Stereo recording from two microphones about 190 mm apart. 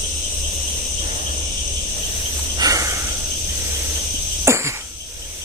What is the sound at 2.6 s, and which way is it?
Cricket, 20° right (ahead or behind).